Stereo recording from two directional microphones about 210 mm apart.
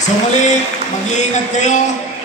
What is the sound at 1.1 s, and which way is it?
Speech, 35° left (ahead or behind).